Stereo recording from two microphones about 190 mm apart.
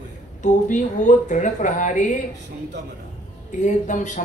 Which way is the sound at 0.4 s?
40° left (ahead or behind).